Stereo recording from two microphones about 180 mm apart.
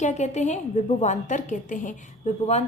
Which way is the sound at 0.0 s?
40° left (ahead or behind).